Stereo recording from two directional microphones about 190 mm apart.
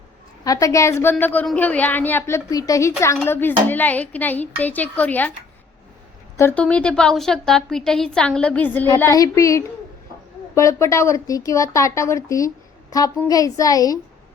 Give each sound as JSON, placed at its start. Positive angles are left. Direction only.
{"t": 0.4, "sound": "a woman's voice", "side_deg": 20}
{"t": 6.3, "sound": "a woman's voice", "side_deg": 10}